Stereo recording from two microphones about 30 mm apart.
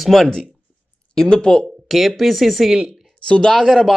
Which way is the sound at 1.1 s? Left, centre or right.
Left.